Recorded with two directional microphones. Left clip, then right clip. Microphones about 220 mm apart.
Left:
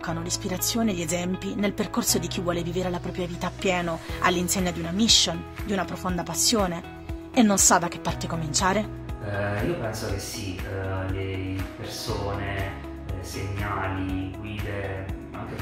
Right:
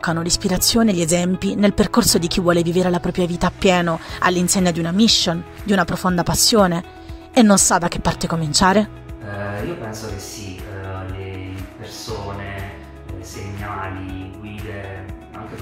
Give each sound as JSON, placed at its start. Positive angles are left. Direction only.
{"t": 0.0, "sound": "speech", "side_deg": -35}